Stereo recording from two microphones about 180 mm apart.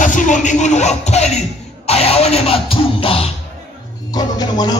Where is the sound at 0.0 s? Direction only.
45° left (ahead or behind).